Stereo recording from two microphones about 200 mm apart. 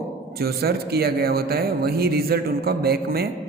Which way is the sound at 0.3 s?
50° right (ahead or behind).